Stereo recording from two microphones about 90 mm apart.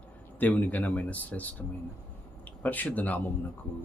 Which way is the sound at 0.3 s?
20° left (ahead or behind).